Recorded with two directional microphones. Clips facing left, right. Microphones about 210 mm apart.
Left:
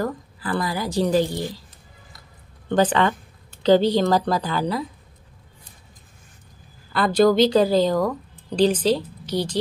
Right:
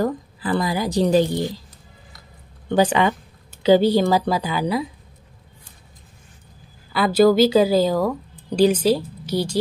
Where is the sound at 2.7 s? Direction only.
10° right (ahead or behind).